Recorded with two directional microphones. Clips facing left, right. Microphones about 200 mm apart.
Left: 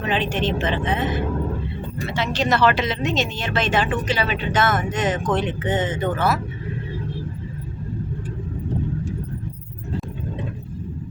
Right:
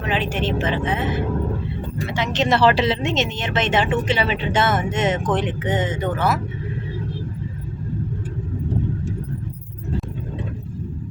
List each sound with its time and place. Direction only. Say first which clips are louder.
0.0 s speech: even; 10° right (ahead or behind)
2.1 s speech: right 1 dB; 20° right (ahead or behind)